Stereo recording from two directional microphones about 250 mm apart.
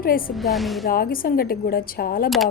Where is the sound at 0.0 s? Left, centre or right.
Left.